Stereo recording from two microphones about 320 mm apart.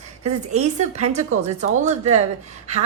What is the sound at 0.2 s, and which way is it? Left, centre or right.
A woman's voice, right.